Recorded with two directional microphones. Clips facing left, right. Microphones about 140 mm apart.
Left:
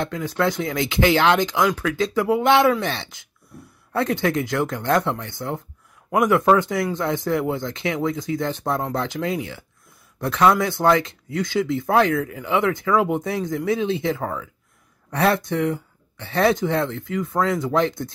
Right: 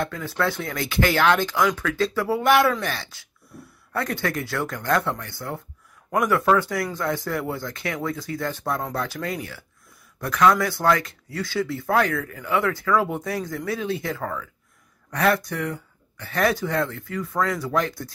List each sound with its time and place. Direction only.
0.0 s speech: 15° left (ahead or behind)